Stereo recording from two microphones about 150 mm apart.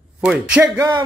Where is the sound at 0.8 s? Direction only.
30° right (ahead or behind).